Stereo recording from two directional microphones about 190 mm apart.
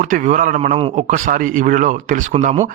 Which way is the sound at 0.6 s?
30° right (ahead or behind).